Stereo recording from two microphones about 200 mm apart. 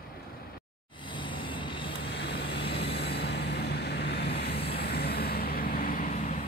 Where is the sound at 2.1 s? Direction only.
55° left (ahead or behind); by 6.4 s 40° left (ahead or behind).